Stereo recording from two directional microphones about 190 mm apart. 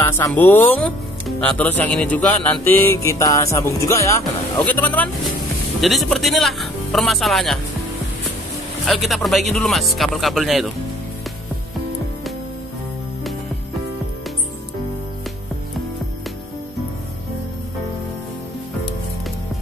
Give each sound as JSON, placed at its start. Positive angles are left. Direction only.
{"t": 0.0, "sound": "speech", "side_deg": 10}
{"t": 8.8, "sound": "speech", "side_deg": 0}